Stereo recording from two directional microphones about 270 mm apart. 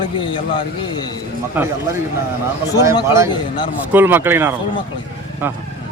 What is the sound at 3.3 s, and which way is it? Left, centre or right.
Speech, centre.